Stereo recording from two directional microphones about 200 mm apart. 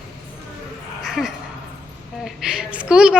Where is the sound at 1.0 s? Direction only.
Centre (ahead or behind).